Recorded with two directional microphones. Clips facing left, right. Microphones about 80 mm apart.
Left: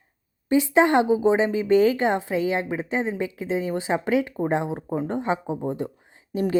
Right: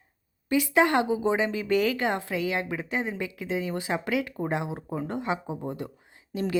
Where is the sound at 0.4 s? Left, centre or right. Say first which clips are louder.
Left 4 dB; left.